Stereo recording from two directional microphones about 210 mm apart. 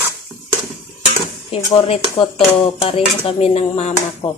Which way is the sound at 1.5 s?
25° left (ahead or behind).